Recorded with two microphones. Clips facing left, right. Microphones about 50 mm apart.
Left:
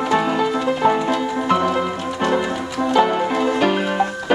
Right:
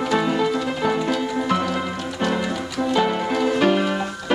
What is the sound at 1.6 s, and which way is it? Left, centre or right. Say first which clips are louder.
Music: left 5 dB; centre.